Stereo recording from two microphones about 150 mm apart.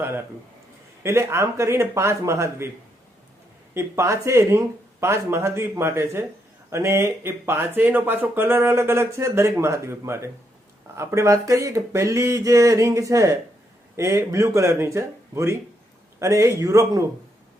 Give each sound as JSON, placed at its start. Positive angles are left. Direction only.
{"t": 1.0, "sound": "speech", "side_deg": -20}
{"t": 3.8, "sound": "speech", "side_deg": -20}